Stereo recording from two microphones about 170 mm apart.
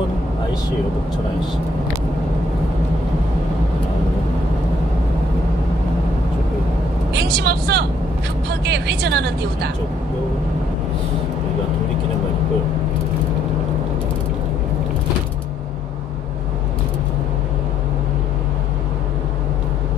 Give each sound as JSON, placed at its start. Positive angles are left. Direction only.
{"t": 7.2, "sound": "a woman's voice", "side_deg": -75}